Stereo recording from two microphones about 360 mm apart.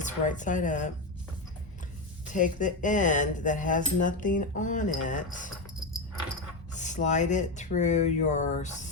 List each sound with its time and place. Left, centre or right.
0.0 s speech: left
2.3 s speech: left
6.7 s speech: centre